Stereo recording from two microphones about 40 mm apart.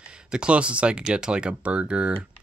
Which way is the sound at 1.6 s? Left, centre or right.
Right.